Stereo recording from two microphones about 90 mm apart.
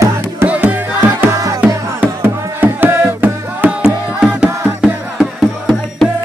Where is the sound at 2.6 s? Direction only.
20° right (ahead or behind).